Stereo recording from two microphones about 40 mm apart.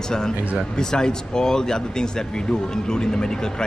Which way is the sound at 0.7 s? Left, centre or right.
Centre.